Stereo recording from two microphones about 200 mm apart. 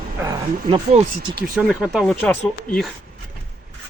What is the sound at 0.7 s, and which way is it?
Speech, 30° right (ahead or behind).